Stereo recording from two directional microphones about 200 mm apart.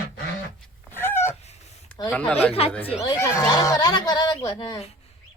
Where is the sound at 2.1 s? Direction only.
5° left (ahead or behind).